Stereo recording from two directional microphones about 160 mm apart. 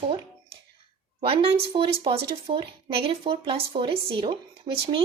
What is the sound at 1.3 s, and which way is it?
Speech, 35° right (ahead or behind).